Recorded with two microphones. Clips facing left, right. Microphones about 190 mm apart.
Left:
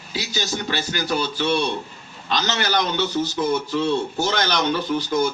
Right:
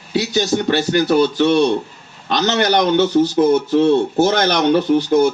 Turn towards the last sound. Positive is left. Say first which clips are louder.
# right 8 dB
turn(degrees=-60)  # may be behind; listen again after turning